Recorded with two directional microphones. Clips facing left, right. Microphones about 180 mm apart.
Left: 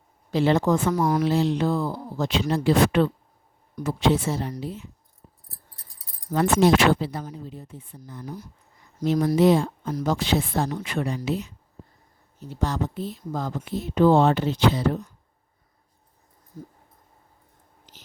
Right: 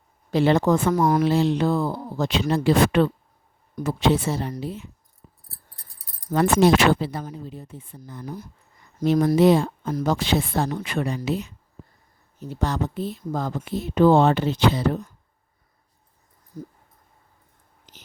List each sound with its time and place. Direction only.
0.3 s speech: 60° right (ahead or behind)
6.3 s speech: 70° right (ahead or behind)
12.5 s speech: 65° right (ahead or behind)